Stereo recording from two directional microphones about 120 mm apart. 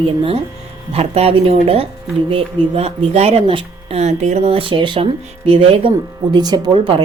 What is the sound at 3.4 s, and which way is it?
Speech, 50° right (ahead or behind).